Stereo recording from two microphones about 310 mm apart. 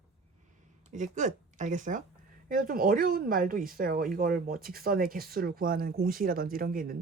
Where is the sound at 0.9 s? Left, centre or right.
Right.